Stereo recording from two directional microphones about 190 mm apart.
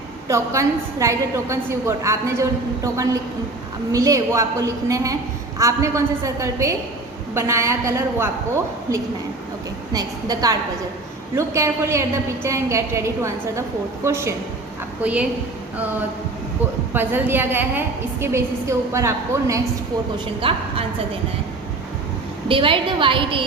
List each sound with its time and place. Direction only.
0.3 s a woman's voice: 15° right (ahead or behind)
16.9 s a woman's voice: 10° right (ahead or behind)
20.1 s a woman's voice: 30° right (ahead or behind)
22.4 s a woman's voice: 25° right (ahead or behind)